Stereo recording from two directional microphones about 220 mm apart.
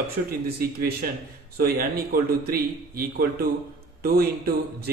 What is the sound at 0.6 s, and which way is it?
A man's voice, 45° right (ahead or behind).